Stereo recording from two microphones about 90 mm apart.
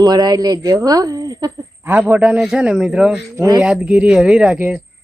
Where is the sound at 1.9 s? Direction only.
20° right (ahead or behind).